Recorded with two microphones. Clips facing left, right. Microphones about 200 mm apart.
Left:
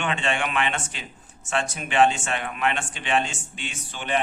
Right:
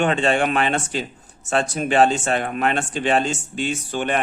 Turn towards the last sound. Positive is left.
turn(degrees=-50)  # may be behind; listen again after turning